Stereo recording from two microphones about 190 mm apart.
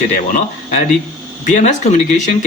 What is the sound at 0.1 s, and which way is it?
Speech, 40° left (ahead or behind).